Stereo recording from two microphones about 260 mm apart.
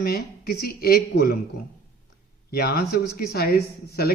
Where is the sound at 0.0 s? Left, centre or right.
Left.